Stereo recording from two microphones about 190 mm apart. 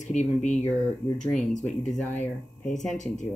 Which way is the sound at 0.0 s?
40° left (ahead or behind).